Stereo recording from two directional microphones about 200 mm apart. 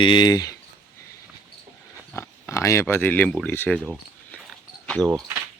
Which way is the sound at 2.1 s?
15° left (ahead or behind).